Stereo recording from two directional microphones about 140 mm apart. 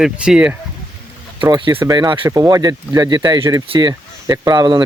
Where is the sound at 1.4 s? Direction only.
35° right (ahead or behind).